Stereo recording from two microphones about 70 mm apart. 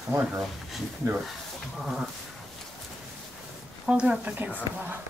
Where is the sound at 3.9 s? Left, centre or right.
Centre.